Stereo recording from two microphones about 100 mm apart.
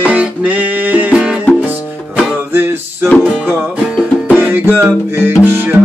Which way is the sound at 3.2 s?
15° right (ahead or behind).